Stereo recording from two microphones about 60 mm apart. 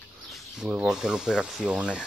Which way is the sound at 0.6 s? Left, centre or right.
Centre.